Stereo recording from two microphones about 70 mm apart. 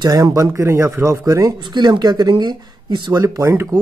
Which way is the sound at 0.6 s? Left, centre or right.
Right.